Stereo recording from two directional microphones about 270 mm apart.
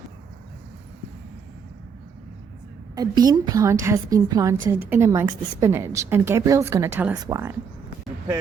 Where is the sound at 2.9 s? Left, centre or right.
Centre.